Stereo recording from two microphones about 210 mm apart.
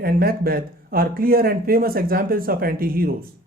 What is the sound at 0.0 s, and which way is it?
Speech, 45° right (ahead or behind).